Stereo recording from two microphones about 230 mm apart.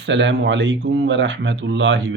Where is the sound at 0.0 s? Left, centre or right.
Right.